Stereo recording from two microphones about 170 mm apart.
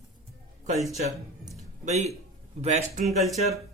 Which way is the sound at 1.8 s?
40° right (ahead or behind).